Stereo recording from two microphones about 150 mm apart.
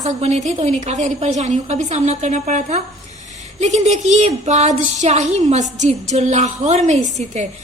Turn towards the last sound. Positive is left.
turn(degrees=-50)  # may be behind; listen again after turning